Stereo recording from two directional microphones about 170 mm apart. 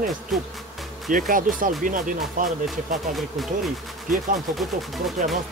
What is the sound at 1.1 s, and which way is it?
Speech, 50° right (ahead or behind).